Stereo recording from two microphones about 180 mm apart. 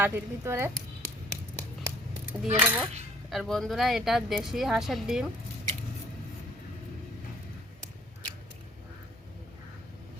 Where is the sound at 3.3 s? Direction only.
Centre (ahead or behind).